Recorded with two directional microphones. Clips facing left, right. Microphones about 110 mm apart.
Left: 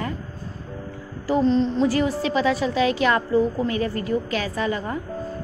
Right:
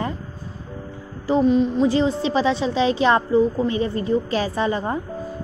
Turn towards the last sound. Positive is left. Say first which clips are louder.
# right 3 dB
turn(degrees=-30)  # may be behind; listen again after turning